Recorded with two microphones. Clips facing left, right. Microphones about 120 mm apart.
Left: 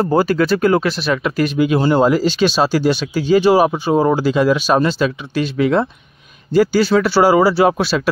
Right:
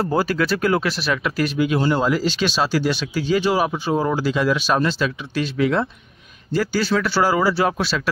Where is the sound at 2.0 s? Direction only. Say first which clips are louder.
Left 6 dB; 40° left (ahead or behind).